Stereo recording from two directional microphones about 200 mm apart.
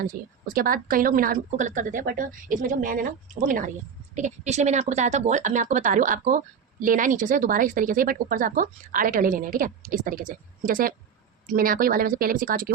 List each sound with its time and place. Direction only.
0.0 s speech: 45° right (ahead or behind)